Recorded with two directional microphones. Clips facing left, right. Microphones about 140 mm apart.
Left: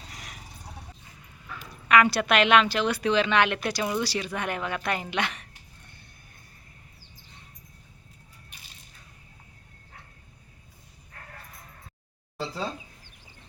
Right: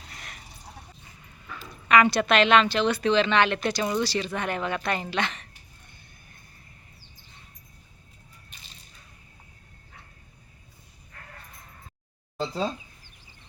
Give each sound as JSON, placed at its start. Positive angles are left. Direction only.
{"t": 0.1, "sound": "horse", "side_deg": 10}
{"t": 1.5, "sound": "a woman's voice", "side_deg": 5}
{"t": 12.4, "sound": "a sound", "side_deg": -20}